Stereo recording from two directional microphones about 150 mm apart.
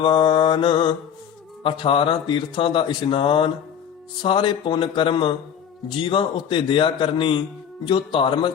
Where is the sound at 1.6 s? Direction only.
35° left (ahead or behind).